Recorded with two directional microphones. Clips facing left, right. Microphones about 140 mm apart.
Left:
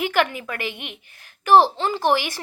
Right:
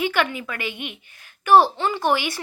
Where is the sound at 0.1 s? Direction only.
45° left (ahead or behind).